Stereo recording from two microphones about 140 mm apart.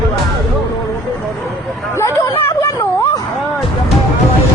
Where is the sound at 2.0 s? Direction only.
20° left (ahead or behind).